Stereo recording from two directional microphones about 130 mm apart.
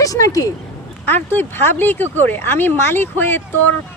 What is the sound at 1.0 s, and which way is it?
Speech, 15° left (ahead or behind).